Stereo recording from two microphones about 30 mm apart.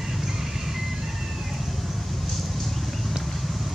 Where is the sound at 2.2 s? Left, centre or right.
Centre.